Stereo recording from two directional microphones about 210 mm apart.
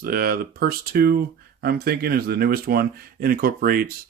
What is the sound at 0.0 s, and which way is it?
Speech, 45° right (ahead or behind).